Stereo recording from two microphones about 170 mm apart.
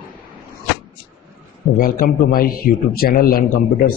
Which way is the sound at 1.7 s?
55° left (ahead or behind).